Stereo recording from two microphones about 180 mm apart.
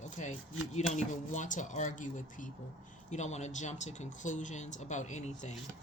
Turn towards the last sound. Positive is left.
turn(degrees=40)  # may be behind; listen again after turning